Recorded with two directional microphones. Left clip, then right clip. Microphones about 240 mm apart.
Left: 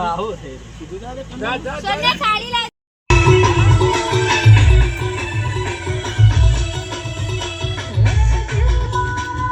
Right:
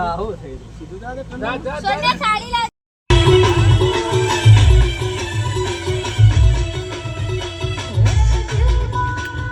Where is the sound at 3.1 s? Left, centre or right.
Centre.